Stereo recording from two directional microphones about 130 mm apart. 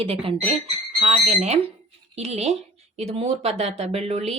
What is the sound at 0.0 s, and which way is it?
A woman's voice, 45° right (ahead or behind).